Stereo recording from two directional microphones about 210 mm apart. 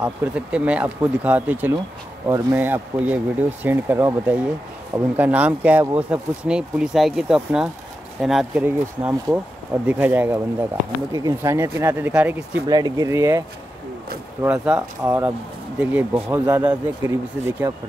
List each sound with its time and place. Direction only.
0.0 s speech: 5° right (ahead or behind)
14.4 s speech: 5° right (ahead or behind)